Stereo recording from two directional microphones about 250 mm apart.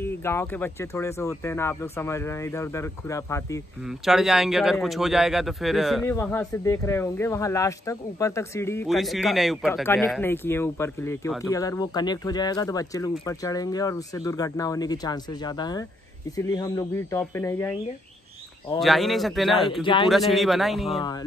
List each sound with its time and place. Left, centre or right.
0.0 s speech: centre
4.0 s speech: centre
8.8 s speech: centre
18.8 s speech: centre
19.8 s a man's voice: centre
20.1 s speech: centre
20.9 s speech: centre